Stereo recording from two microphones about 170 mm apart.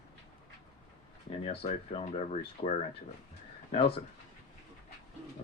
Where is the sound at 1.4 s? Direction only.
35° left (ahead or behind).